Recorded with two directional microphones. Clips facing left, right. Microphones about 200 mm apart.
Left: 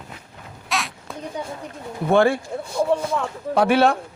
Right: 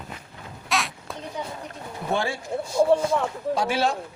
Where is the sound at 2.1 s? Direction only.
60° left (ahead or behind).